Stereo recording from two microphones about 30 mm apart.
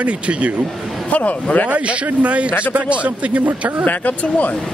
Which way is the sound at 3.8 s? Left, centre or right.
Left.